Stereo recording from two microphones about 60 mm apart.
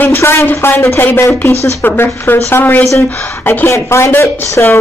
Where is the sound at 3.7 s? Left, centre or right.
Left.